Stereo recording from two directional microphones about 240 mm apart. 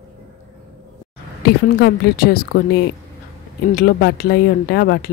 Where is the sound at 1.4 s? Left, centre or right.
Left.